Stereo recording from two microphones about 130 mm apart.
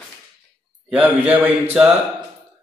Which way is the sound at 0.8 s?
10° right (ahead or behind).